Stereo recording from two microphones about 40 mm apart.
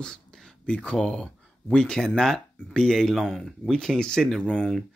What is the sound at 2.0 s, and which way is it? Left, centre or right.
Speech, centre.